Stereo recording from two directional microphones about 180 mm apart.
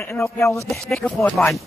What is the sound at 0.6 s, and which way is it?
Speech, centre (ahead or behind).